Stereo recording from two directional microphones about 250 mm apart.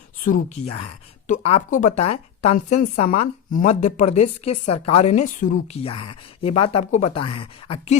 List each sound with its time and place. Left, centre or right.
0.3 s a woman's voice: left